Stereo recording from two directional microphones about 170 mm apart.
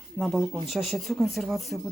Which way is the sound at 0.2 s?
Centre (ahead or behind).